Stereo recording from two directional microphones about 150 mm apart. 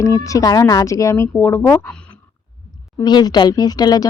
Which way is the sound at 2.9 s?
25° left (ahead or behind).